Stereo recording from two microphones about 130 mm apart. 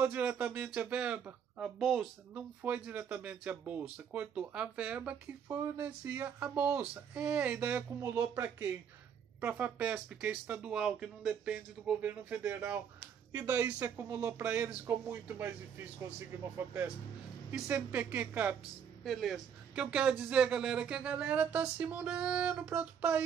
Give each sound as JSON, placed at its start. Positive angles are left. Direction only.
{"t": 0.0, "sound": "speech", "side_deg": -15}
{"t": 19.0, "sound": "speech", "side_deg": 0}